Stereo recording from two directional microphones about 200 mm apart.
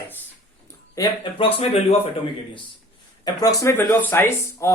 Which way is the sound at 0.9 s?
25° left (ahead or behind).